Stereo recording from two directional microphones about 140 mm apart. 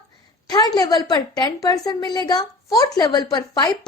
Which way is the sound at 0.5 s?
30° left (ahead or behind).